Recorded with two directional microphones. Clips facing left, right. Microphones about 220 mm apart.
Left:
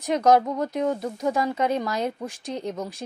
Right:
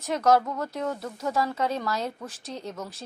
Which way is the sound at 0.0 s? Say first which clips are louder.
Left 3 dB; 15° left (ahead or behind).